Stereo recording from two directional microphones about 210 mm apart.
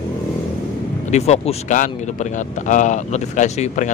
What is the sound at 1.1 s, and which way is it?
Speech, 30° left (ahead or behind).